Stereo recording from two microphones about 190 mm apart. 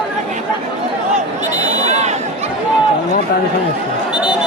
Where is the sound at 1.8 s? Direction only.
35° right (ahead or behind).